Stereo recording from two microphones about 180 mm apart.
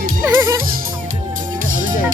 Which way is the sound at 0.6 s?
55° right (ahead or behind).